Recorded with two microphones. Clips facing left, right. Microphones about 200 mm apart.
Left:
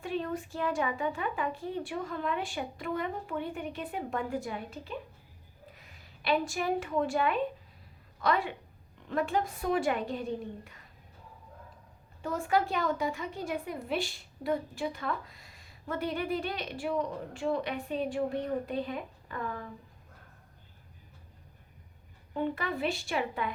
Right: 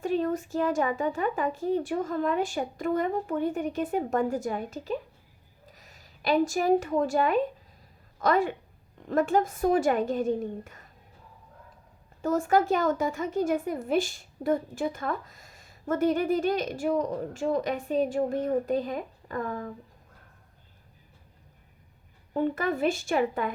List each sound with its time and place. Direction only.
0.0 s a woman's voice: 40° right (ahead or behind)
12.2 s a woman's voice: 45° right (ahead or behind)
22.3 s a woman's voice: 45° right (ahead or behind)